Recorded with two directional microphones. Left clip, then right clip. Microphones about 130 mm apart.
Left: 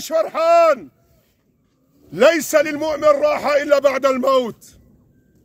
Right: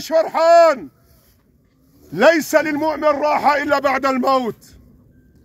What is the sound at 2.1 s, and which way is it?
A man's voice, 30° left (ahead or behind).